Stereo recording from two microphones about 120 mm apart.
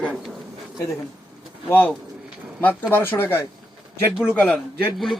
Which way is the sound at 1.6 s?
15° left (ahead or behind).